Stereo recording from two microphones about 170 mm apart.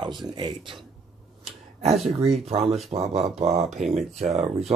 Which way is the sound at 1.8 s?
40° right (ahead or behind).